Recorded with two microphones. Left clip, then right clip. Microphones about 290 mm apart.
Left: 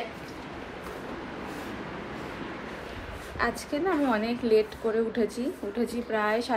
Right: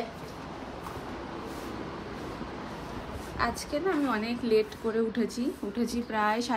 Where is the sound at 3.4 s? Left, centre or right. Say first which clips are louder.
Left 1 dB; centre.